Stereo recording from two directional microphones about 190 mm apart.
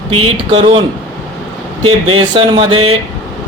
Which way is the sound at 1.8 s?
30° right (ahead or behind).